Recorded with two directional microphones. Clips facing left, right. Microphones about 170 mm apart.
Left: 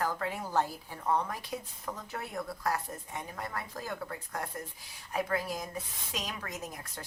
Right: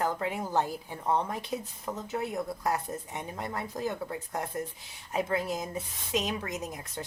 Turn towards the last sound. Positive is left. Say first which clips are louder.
# right 5 dB
turn(degrees=-20)  # may be behind; listen again after turning